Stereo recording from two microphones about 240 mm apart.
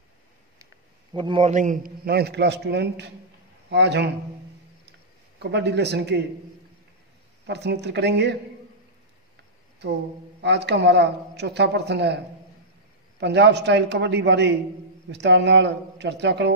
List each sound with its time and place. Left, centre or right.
1.1 s a man's voice: right
5.4 s speech: right
7.4 s speech: right
10.4 s speech: right
13.2 s speech: right